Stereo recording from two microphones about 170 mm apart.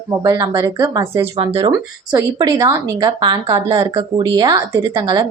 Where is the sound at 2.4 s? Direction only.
25° right (ahead or behind).